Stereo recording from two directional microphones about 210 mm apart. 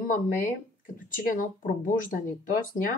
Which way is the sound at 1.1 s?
40° left (ahead or behind).